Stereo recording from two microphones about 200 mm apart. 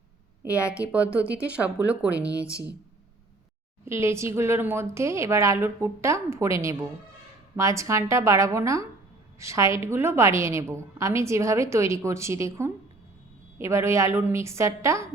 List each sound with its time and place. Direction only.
0.9 s a woman's voice: 5° right (ahead or behind)
2.1 s speech: 15° left (ahead or behind)
3.8 s a woman's voice: 15° right (ahead or behind)